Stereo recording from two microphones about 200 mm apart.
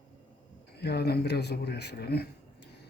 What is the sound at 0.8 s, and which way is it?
Speech, 55° left (ahead or behind).